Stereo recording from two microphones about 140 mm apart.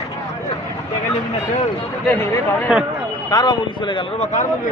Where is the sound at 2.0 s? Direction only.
15° left (ahead or behind).